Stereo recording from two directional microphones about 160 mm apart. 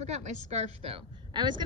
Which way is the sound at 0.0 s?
45° right (ahead or behind).